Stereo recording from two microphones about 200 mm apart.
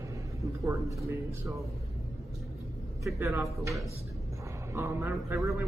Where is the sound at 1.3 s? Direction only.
15° right (ahead or behind).